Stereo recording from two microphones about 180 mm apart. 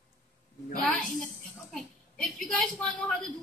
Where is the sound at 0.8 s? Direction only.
Centre (ahead or behind).